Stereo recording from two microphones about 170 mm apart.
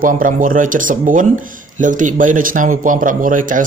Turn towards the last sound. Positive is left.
turn(degrees=-50)  # may be behind; listen again after turning